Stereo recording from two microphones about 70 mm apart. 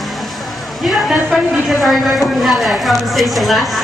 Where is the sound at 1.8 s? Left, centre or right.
Centre.